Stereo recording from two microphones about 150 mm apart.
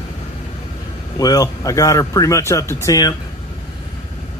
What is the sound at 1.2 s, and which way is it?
Speech, 25° left (ahead or behind).